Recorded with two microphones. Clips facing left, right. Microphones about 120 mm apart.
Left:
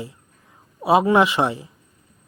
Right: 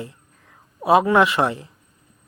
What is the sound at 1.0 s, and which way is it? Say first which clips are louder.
Speech: even; 20° left (ahead or behind).